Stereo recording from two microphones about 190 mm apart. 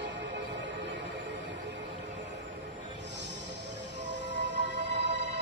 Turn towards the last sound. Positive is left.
turn(degrees=-70)  # may be behind; listen again after turning